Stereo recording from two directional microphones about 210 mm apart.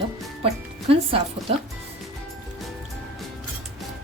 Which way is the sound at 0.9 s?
25° right (ahead or behind).